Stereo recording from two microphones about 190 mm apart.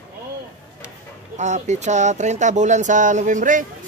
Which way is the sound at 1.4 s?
40° right (ahead or behind).